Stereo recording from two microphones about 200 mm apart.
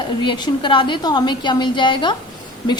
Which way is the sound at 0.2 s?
20° left (ahead or behind).